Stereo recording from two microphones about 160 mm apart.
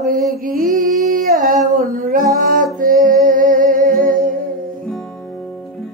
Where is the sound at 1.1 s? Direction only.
55° right (ahead or behind).